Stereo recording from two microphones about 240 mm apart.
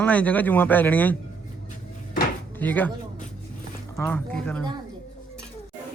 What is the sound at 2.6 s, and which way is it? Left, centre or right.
Speech, centre.